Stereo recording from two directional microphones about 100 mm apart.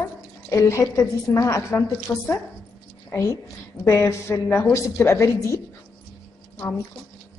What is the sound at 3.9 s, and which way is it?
A woman's voice, 30° left (ahead or behind).